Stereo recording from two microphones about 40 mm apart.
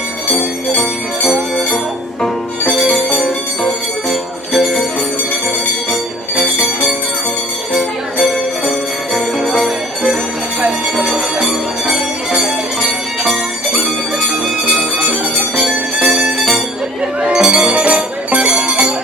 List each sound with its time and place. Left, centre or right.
4.1 s music: centre
5.9 s music: centre
7.7 s music: centre
11.1 s music: centre
13.7 s jingle bell: centre
16.0 s bell: right
17.3 s music: centre